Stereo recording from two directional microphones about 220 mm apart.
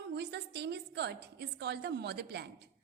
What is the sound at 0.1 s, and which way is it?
A woman's voice, 50° right (ahead or behind).